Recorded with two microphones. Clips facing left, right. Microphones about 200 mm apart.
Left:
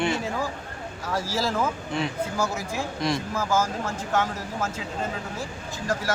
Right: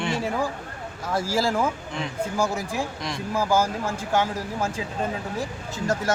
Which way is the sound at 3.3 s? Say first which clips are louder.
Right 6 dB; 15° right (ahead or behind).